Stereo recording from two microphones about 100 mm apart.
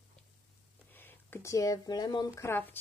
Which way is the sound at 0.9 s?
20° left (ahead or behind).